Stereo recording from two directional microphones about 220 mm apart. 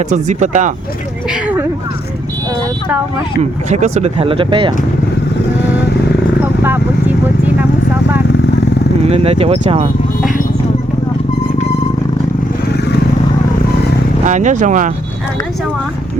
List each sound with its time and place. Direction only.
0.1 s speech: 35° right (ahead or behind)
1.3 s speech: 5° right (ahead or behind)
3.7 s speech: 30° right (ahead or behind)
6.4 s a sound: 10° right (ahead or behind)
9.0 s speech: 25° right (ahead or behind)
14.3 s speech: 35° right (ahead or behind)